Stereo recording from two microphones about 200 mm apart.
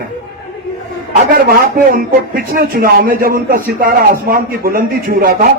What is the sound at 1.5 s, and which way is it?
Speech, 45° right (ahead or behind).